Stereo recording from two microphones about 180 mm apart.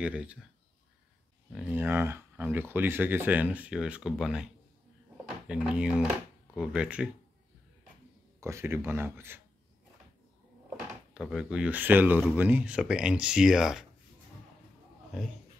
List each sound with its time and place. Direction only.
0.0 s speech: 5° right (ahead or behind)
1.5 s speech: 5° right (ahead or behind)
5.1 s drawer open or close: 5° right (ahead or behind)
6.5 s speech: 5° right (ahead or behind)
8.4 s speech: 15° right (ahead or behind)
11.1 s speech: 5° right (ahead or behind)